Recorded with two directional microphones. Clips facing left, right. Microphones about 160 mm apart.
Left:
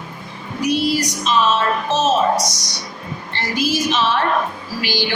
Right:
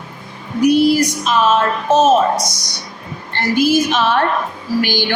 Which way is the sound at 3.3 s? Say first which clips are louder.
Right 7 dB; 55° right (ahead or behind).